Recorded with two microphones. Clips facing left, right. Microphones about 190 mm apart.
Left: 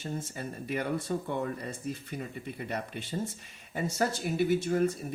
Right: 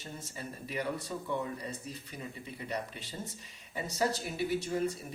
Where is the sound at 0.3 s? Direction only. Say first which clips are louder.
Left 1 dB; 50° left (ahead or behind).